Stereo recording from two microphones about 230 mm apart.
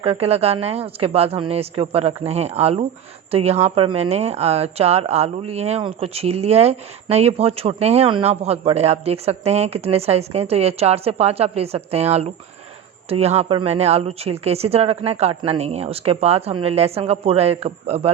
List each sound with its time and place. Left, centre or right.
0.0 s speech: right